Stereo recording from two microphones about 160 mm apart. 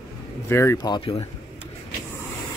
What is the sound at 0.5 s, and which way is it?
Speech, 15° left (ahead or behind).